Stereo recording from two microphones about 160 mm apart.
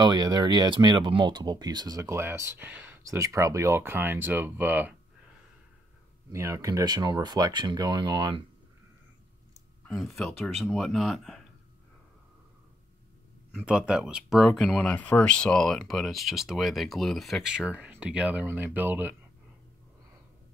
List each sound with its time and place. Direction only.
0.0 s speech: 25° right (ahead or behind)
6.3 s speech: 20° right (ahead or behind)
9.8 s speech: centre (ahead or behind)
13.6 s speech: 5° right (ahead or behind)